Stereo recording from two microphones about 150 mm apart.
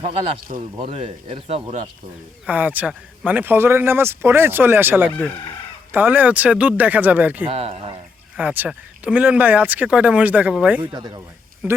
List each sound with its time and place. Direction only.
0.8 s speech: 45° right (ahead or behind)
2.5 s a man's voice: 10° right (ahead or behind)
7.4 s speech: 40° right (ahead or behind)
8.4 s a man's voice: 10° right (ahead or behind)
10.8 s speech: 30° right (ahead or behind)
11.6 s speech: 10° right (ahead or behind)